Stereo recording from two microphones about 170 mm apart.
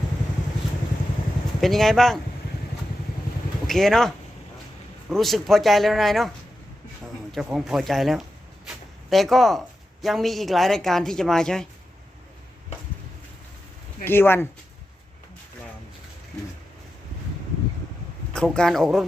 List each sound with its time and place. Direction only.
1.6 s speech: centre (ahead or behind)
3.7 s speech: centre (ahead or behind)
7.3 s speech: centre (ahead or behind)
14.0 s speech: 15° left (ahead or behind)
18.5 s speech: 5° left (ahead or behind)